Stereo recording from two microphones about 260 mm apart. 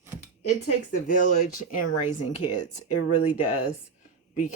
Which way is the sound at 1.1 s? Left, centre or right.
Left.